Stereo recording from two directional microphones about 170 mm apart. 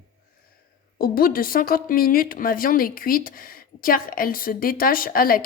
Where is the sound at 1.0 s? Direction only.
60° left (ahead or behind).